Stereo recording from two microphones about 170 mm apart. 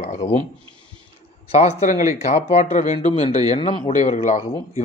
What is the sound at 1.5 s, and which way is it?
Speech, 40° left (ahead or behind).